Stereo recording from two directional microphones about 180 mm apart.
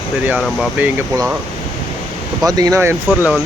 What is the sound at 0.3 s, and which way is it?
Speech, 5° left (ahead or behind).